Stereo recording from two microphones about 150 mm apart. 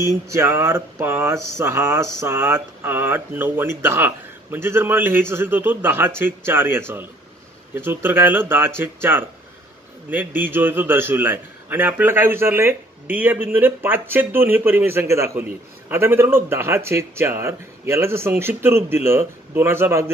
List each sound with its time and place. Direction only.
0.0 s mantra: 20° right (ahead or behind)